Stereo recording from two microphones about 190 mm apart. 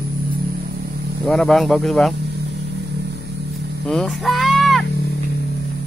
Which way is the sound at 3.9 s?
Centre (ahead or behind).